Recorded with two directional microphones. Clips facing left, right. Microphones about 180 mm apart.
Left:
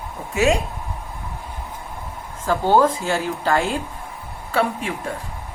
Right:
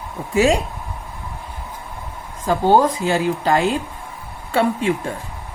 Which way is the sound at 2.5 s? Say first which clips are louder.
Right 2 dB; 15° right (ahead or behind).